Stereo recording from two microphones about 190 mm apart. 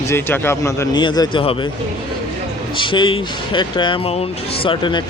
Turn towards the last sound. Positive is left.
turn(degrees=25)  # may be behind; listen again after turning